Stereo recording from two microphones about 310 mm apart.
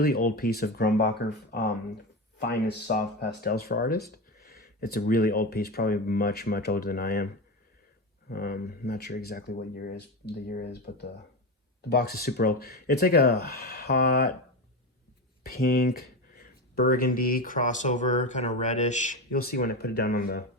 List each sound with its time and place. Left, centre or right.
0.0 s speech: left
8.3 s speech: left
15.4 s speech: left